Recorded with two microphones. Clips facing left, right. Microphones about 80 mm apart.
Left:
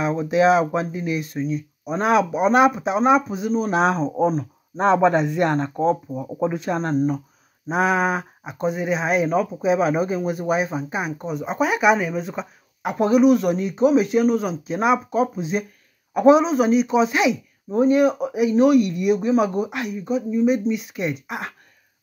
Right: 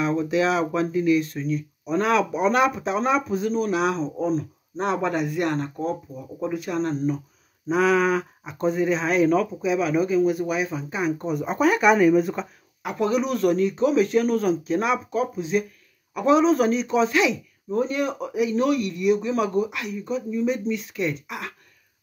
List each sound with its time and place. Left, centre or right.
0.0 s speech: centre
3.5 s speech: left
5.0 s speech: left
6.8 s speech: left
7.7 s speech: centre
9.7 s speech: left; by 12.4 s centre
12.8 s speech: left
13.2 s speech: centre
16.3 s speech: centre; by 21.5 s left